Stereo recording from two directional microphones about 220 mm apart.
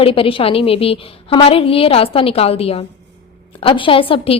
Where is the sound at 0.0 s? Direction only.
25° left (ahead or behind).